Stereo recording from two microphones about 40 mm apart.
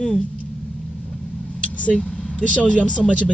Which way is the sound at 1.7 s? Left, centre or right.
Left.